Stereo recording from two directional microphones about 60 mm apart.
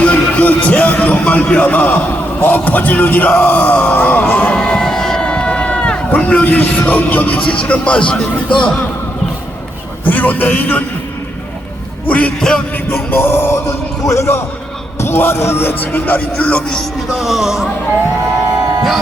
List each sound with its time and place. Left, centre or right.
0.0 s speech: left
4.5 s a sound: centre
5.2 s a man's voice: centre
10.0 s speech: left
12.0 s speech: left
12.4 s music: centre
13.1 s music: left
14.0 s a man's voice: left
15.8 s speech: left; by 16.8 s centre
17.2 s speech: centre